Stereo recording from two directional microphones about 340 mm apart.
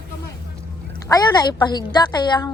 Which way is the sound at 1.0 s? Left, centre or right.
Centre.